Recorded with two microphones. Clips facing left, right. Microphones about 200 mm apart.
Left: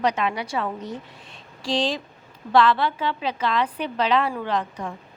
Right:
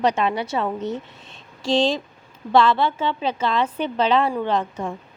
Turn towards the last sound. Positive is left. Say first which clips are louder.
# right 3 dB
turn(degrees=-25)  # may be behind; listen again after turning